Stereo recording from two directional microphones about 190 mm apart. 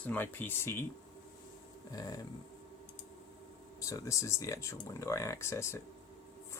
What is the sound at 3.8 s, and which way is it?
Speech, 15° left (ahead or behind).